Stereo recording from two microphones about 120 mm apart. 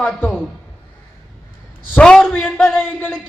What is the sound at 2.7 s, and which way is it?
Speech, 15° left (ahead or behind).